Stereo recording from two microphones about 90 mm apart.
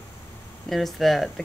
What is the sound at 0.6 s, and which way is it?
Speech, centre (ahead or behind).